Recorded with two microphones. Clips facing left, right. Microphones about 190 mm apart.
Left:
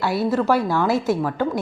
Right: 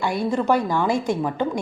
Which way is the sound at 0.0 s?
5° left (ahead or behind).